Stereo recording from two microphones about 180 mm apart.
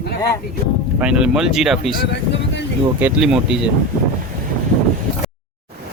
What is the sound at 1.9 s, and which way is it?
Speech, 65° left (ahead or behind).